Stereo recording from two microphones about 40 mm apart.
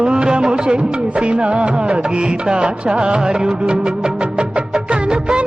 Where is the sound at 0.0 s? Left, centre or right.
Right.